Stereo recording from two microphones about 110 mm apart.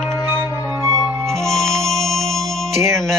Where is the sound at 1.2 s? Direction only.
5° left (ahead or behind).